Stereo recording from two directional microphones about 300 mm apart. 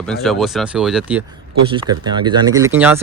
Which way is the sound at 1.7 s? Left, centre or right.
Centre.